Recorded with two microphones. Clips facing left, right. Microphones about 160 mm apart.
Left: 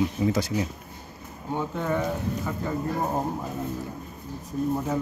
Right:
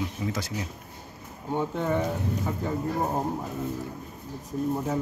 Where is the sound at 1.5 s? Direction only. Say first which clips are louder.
Right 1 dB; 15° right (ahead or behind).